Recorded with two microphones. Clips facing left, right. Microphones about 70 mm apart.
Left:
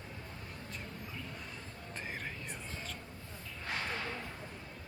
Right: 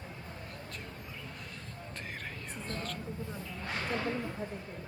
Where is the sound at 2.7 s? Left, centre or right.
Centre.